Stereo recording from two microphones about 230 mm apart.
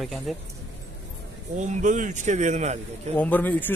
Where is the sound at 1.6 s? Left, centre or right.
Right.